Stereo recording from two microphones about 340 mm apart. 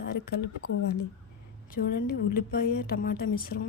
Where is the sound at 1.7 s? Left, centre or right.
Left.